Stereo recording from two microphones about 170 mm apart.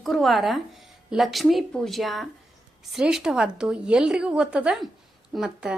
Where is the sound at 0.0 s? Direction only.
Centre (ahead or behind).